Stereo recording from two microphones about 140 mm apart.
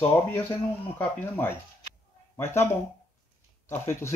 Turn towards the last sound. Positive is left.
turn(degrees=20)  # may be behind; listen again after turning